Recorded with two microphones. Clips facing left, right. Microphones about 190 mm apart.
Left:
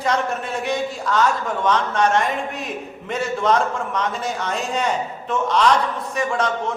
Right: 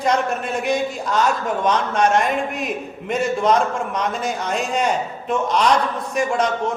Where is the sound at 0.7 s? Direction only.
15° right (ahead or behind).